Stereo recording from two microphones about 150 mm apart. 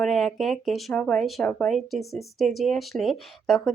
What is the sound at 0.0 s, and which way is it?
Speech, centre (ahead or behind).